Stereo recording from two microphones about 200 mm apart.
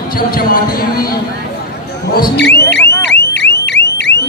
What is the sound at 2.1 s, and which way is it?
Speech, 55° left (ahead or behind).